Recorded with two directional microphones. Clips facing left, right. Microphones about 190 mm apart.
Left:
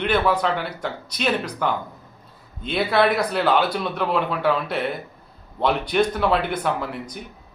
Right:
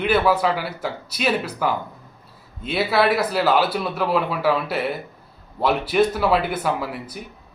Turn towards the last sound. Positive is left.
turn(degrees=-5)  # may be behind; listen again after turning